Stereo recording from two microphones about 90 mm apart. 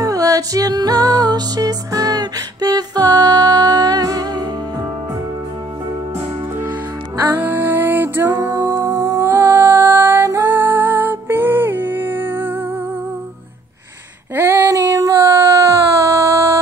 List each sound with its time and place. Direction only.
0.0 s music: 40° right (ahead or behind)
7.2 s music: 20° right (ahead or behind)
14.3 s female singing: 25° right (ahead or behind)
14.8 s a sound: 40° right (ahead or behind)